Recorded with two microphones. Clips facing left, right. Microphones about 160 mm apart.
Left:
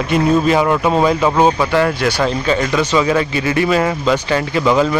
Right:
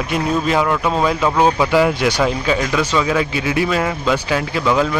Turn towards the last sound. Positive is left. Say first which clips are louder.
# left 3 dB
turn(degrees=0)  # may be behind; listen again after turning